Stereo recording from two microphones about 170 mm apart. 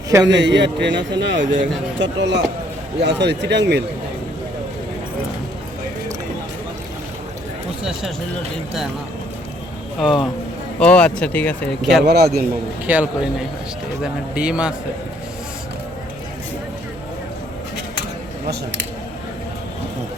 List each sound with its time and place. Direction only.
0.3 s a man's voice: 90° right
10.0 s speech: centre (ahead or behind)
12.0 s a man's voice: 70° right (ahead or behind)
12.9 s speech: 10° right (ahead or behind)